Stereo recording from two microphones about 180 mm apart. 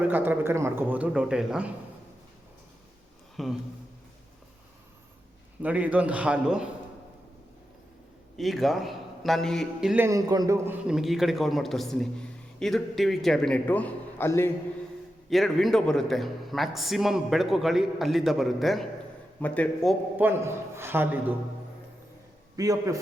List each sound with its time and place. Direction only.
0.0 s speech: 10° right (ahead or behind)
3.4 s a man's voice: centre (ahead or behind)
5.6 s speech: 10° right (ahead or behind)
8.4 s a man's voice: centre (ahead or behind); by 10.8 s 20° right (ahead or behind)
10.8 s a man's voice: centre (ahead or behind); by 14.5 s 15° left (ahead or behind)
15.3 s a man's voice: centre (ahead or behind)
20.1 s speech: 10° right (ahead or behind)
22.5 s a man's voice: 20° right (ahead or behind)